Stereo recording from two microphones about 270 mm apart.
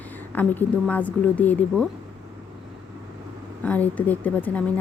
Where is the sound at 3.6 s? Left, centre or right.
Centre.